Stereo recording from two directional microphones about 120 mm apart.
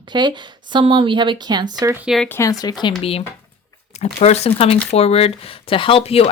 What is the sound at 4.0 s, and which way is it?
A woman's voice, 60° left (ahead or behind).